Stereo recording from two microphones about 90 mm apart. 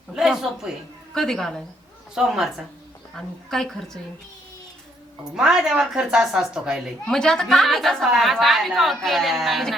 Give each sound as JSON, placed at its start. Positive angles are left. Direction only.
{"t": 0.2, "sound": "a woman's voice", "side_deg": -5}
{"t": 2.1, "sound": "a woman's voice", "side_deg": -5}
{"t": 5.3, "sound": "a woman's voice", "side_deg": -5}
{"t": 7.1, "sound": "a woman's voice", "side_deg": 5}